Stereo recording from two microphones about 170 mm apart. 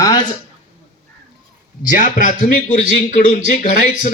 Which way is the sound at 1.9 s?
50° left (ahead or behind).